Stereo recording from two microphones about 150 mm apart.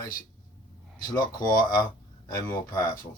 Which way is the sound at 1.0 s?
25° left (ahead or behind).